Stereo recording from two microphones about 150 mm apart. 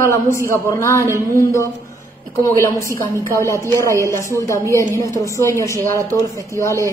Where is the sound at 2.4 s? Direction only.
20° left (ahead or behind).